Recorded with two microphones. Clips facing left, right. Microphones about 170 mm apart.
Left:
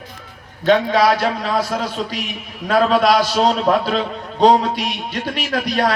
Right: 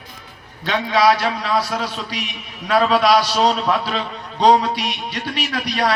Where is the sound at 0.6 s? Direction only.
50° left (ahead or behind).